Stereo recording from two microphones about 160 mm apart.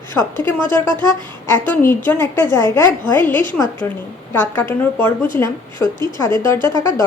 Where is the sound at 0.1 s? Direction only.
10° left (ahead or behind).